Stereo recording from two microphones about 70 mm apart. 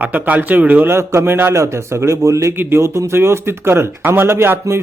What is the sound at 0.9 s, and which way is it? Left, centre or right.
A man's voice, right.